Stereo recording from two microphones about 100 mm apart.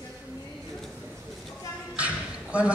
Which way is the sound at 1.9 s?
10° right (ahead or behind).